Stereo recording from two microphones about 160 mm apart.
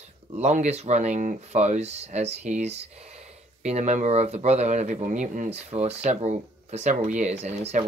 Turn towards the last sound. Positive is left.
turn(degrees=-40)  # may be behind; listen again after turning